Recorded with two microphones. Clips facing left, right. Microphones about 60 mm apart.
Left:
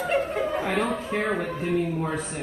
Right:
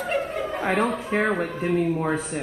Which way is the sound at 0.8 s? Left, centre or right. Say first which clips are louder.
Right 3 dB; right.